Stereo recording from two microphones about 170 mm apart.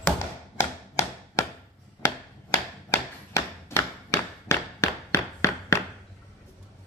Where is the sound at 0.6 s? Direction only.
15° left (ahead or behind).